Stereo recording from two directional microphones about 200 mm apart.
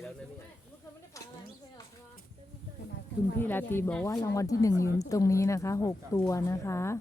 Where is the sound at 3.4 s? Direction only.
10° left (ahead or behind).